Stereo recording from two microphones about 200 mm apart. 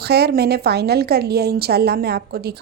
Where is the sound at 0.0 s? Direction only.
55° right (ahead or behind).